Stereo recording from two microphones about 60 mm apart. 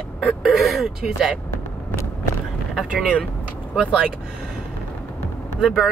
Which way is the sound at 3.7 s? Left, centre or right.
Centre.